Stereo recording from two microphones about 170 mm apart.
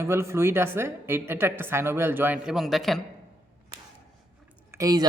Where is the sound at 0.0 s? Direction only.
15° right (ahead or behind); by 3.0 s centre (ahead or behind).